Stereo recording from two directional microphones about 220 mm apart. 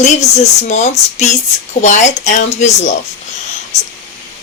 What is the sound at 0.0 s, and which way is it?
Speech, 30° left (ahead or behind).